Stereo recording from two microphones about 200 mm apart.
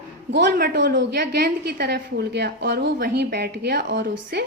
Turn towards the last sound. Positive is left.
turn(degrees=-55)  # may be behind; listen again after turning